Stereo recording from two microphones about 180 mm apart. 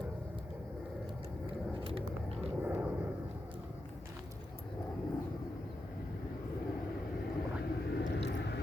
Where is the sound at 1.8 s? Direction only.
30° right (ahead or behind).